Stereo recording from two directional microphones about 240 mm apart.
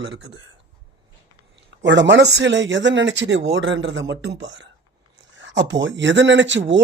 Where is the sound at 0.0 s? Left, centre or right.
Right.